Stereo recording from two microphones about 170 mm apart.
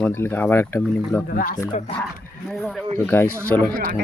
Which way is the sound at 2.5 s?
Centre (ahead or behind).